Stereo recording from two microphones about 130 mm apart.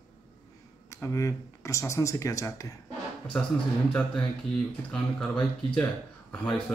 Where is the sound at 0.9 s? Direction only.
20° left (ahead or behind).